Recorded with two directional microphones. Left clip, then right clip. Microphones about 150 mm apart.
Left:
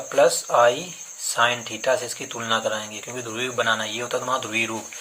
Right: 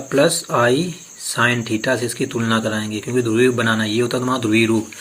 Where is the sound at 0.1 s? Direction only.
40° right (ahead or behind).